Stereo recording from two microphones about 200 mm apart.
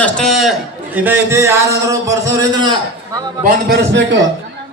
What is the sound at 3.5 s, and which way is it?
Speech, 50° right (ahead or behind).